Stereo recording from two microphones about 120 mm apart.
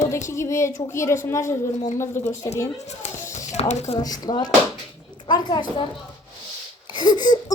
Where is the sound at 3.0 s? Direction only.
65° left (ahead or behind).